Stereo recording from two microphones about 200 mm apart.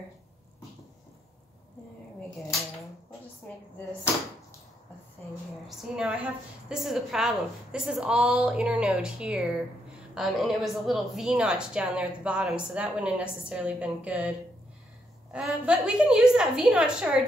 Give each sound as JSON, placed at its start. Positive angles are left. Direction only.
{"t": 5.7, "sound": "speech", "side_deg": 0}
{"t": 15.3, "sound": "speech", "side_deg": -5}